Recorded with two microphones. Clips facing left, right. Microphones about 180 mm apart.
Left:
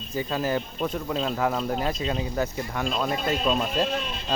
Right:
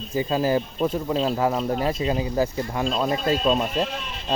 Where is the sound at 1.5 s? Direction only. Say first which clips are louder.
Right 3 dB; 5° right (ahead or behind).